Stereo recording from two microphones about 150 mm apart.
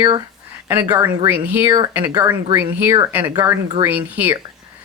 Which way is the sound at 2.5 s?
15° right (ahead or behind).